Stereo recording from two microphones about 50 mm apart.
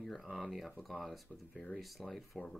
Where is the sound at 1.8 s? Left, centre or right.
Centre.